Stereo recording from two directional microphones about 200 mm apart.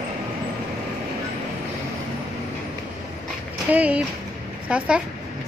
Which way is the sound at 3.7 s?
5° right (ahead or behind).